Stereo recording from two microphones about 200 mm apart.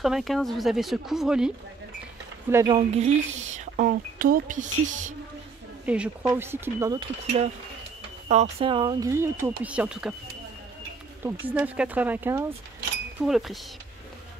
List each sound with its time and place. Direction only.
0.0 s speech: centre (ahead or behind)
2.5 s speech: 25° right (ahead or behind); by 5.1 s 40° right (ahead or behind)
5.9 s speech: 5° right (ahead or behind)
8.3 s speech: 30° right (ahead or behind)
9.1 s speech: 15° right (ahead or behind)
11.5 s speech: 5° right (ahead or behind)
13.2 s speech: centre (ahead or behind)